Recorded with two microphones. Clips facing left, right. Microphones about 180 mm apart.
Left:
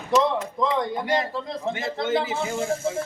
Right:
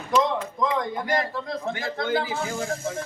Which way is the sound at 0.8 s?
25° left (ahead or behind).